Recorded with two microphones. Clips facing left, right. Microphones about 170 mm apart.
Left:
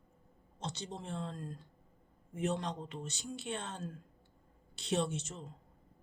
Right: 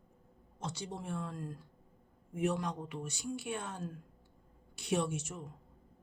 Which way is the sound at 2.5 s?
25° left (ahead or behind).